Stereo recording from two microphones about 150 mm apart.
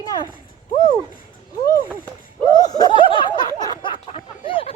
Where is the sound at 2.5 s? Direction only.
25° left (ahead or behind).